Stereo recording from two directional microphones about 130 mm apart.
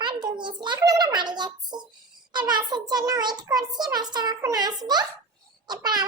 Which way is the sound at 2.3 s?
35° right (ahead or behind).